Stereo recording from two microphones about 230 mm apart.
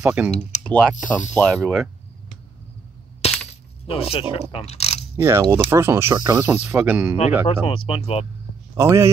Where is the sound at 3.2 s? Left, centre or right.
Left.